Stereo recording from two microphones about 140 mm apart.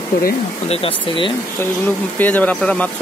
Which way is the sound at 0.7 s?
40° left (ahead or behind).